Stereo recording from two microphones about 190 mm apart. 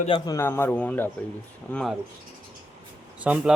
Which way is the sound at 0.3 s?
15° left (ahead or behind).